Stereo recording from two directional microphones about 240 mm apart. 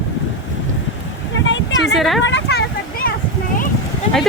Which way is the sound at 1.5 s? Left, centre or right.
Left.